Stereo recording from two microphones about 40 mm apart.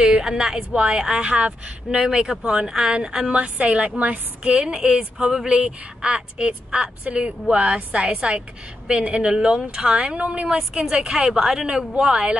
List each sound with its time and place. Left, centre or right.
0.2 s a woman's voice: centre
3.3 s a woman's voice: right
4.0 s a woman's voice: right
4.6 s a woman's voice: right
5.3 s speech: centre
5.6 s a woman's voice: right
9.8 s a woman's voice: right
10.7 s a woman's voice: centre
11.2 s speech: centre
11.6 s a woman's voice: right